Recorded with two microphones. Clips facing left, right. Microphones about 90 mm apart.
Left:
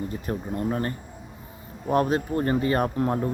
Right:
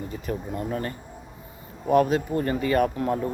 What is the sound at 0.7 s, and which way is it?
Speech, 35° left (ahead or behind).